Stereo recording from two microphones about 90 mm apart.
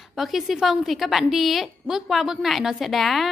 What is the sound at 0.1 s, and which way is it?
A woman's voice, centre (ahead or behind).